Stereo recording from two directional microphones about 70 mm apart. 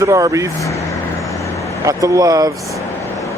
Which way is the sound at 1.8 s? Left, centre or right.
Right.